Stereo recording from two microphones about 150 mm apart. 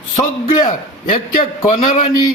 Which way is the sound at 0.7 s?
55° left (ahead or behind).